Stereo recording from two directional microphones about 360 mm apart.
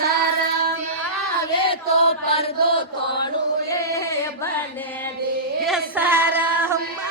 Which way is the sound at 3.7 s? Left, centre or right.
Centre.